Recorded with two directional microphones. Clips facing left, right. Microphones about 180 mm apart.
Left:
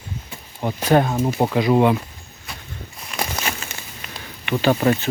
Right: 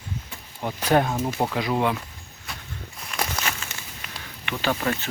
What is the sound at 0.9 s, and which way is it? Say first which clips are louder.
Speech: left 4 dB; 5° right (ahead or behind).